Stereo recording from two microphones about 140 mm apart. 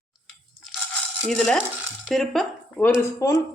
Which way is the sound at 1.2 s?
5° left (ahead or behind).